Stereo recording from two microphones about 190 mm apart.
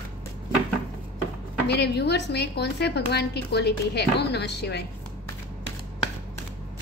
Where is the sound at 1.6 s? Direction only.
60° left (ahead or behind).